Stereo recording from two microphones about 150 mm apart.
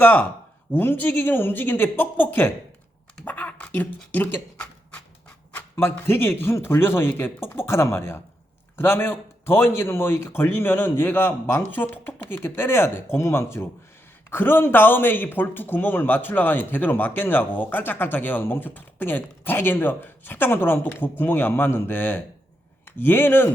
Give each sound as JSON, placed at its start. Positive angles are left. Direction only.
{"t": 0.0, "sound": "speech", "side_deg": 10}
{"t": 3.2, "sound": "a sound", "side_deg": 10}
{"t": 5.5, "sound": "speech", "side_deg": 15}